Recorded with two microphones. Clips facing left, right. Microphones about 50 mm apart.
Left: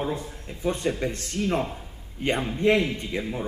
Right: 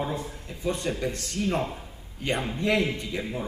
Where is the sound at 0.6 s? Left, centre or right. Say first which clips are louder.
Left 2 dB; left.